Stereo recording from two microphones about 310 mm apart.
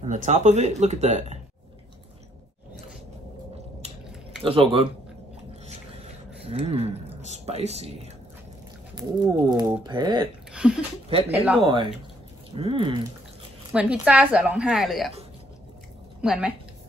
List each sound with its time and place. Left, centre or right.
0.0 s speech: right
4.4 s speech: centre
6.4 s speech: centre
10.5 s a sound: centre
11.6 s speech: centre
13.7 s a woman's voice: centre
16.2 s a woman's voice: centre